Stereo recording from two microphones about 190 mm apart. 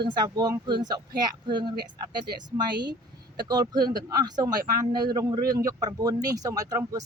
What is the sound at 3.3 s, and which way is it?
Speech, 20° right (ahead or behind).